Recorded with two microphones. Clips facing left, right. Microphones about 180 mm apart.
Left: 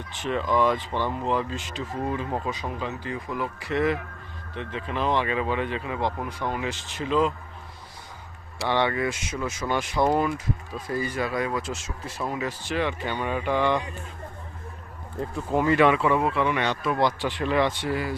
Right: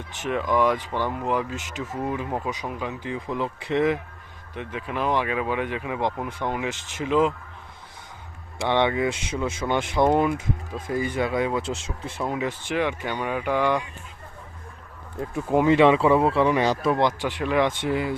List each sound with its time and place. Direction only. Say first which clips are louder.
0.2 s speech: right 1 dB; 15° right (ahead or behind)
8.5 s speech: right 2 dB; 20° right (ahead or behind)
15.2 s speech: right 3 dB; 10° right (ahead or behind); by 17.0 s 35° right (ahead or behind)
17.0 s speech: right 1 dB; 15° right (ahead or behind)